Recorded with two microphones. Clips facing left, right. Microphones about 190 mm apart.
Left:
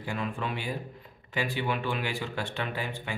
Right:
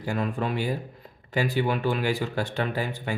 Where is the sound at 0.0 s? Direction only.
40° right (ahead or behind).